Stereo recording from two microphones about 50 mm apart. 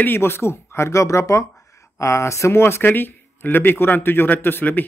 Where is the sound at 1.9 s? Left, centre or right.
Left.